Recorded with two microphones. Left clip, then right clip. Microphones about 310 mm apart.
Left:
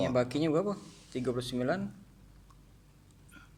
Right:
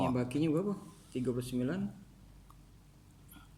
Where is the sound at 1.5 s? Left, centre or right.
Left.